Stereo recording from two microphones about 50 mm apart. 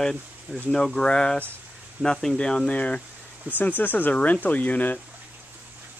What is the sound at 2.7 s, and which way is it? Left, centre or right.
Speech, left.